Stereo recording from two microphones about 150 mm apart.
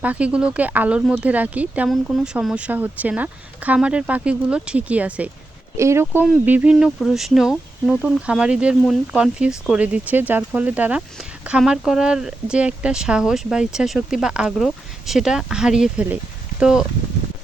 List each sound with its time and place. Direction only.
0.0 s speech: 10° right (ahead or behind)